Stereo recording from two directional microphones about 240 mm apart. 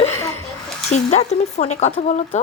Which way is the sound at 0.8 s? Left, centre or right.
Left.